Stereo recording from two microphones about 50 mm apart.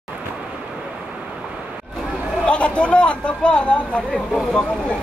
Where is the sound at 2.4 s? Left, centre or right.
Left.